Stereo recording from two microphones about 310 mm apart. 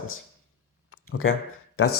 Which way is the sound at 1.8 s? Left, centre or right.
Left.